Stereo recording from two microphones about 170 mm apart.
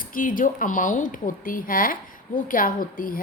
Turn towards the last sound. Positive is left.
turn(degrees=55)  # may be behind; listen again after turning